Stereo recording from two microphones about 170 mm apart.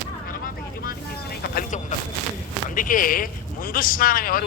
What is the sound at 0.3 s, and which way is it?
Vehicle, 60° left (ahead or behind).